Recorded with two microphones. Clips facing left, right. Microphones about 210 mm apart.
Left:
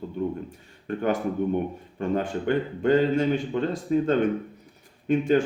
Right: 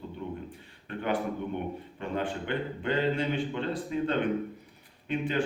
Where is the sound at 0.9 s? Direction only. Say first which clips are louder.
Left 5 dB; 45° left (ahead or behind).